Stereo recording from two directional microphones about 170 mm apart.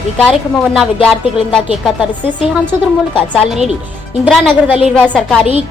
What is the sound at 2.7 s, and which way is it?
Speech, 25° left (ahead or behind).